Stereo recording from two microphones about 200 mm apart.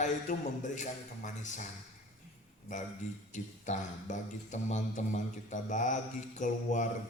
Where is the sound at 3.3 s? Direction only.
35° left (ahead or behind).